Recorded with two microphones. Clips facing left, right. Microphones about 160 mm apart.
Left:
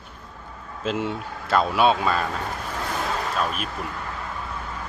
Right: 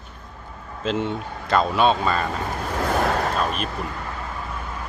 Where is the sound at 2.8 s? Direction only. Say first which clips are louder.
Right 8 dB; 55° right (ahead or behind).